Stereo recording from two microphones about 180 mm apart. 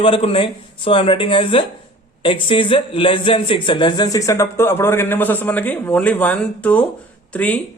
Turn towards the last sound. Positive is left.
turn(degrees=10)  # may be behind; listen again after turning